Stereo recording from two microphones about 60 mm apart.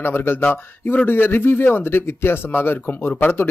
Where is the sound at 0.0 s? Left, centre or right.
Left.